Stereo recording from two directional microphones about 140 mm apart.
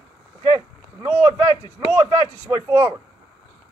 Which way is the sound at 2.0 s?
30° right (ahead or behind).